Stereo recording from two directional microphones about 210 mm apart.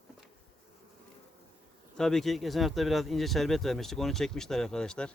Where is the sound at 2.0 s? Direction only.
Centre (ahead or behind).